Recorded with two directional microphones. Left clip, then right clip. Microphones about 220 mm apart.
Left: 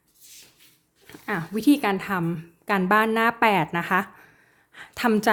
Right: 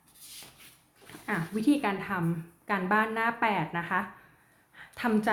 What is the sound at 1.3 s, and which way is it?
A woman's voice, 50° left (ahead or behind).